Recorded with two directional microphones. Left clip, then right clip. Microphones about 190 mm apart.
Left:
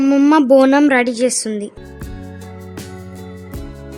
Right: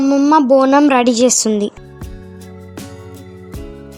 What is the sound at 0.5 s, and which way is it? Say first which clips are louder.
Speech: left 1 dB; centre (ahead or behind).